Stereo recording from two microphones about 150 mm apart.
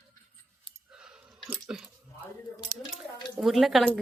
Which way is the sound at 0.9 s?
5° right (ahead or behind).